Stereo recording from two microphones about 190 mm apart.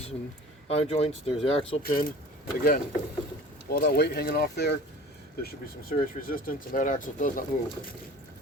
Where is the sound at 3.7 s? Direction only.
50° left (ahead or behind).